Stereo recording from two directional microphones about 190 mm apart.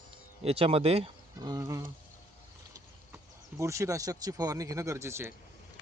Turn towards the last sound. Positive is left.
turn(degrees=-15)  # may be behind; listen again after turning